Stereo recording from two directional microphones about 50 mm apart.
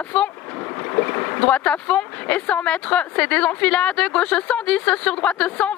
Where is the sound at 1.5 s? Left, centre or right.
Left.